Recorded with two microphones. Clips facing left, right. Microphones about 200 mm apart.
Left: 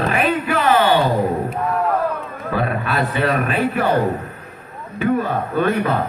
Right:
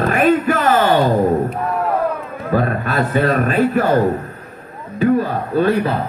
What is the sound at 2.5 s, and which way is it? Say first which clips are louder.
A man's voice: right 3 dB; 40° right (ahead or behind).